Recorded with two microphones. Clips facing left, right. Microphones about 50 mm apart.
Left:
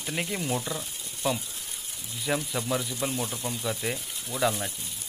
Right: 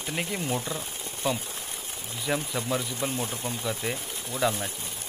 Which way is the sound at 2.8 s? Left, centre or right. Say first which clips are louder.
Even; right.